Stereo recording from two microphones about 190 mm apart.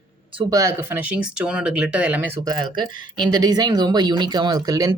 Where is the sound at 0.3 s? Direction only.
15° right (ahead or behind).